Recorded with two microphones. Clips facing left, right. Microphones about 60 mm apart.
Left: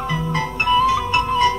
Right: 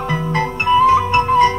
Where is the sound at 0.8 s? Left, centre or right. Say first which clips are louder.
Right 8 dB; right.